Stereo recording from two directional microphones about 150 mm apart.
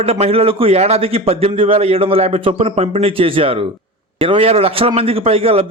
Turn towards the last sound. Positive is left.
turn(degrees=-40)  # may be behind; listen again after turning